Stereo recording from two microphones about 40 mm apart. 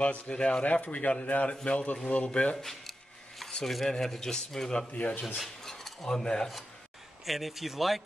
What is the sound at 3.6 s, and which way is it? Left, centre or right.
Speech, centre.